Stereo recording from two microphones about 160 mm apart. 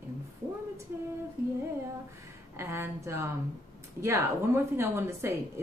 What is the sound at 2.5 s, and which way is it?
A woman's voice, 15° right (ahead or behind).